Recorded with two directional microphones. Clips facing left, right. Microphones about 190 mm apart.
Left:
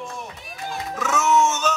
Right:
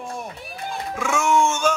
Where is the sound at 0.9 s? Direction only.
10° right (ahead or behind).